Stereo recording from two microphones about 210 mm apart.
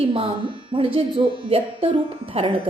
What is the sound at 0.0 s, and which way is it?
A woman's voice, 25° right (ahead or behind).